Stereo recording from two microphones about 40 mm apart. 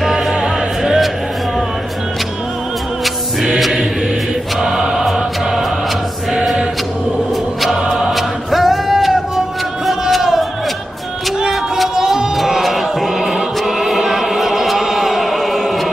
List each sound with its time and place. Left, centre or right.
0.0 s music: centre
0.3 s music: centre
3.0 s music: centre
4.6 s choir: centre
5.1 s music: centre
8.1 s a sound: centre
9.8 s music: centre
11.9 s music: centre